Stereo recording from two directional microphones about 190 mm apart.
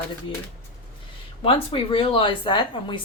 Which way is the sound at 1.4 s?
30° left (ahead or behind).